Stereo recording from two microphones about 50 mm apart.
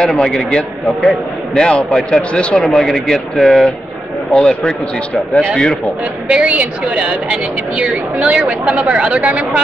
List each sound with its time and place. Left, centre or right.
0.0 s a man's voice: centre
6.2 s a woman's voice: right